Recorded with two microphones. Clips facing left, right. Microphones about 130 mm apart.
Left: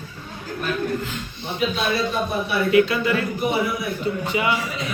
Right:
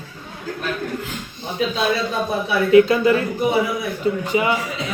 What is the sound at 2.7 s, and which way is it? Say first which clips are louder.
Speech: right 6 dB; 35° right (ahead or behind).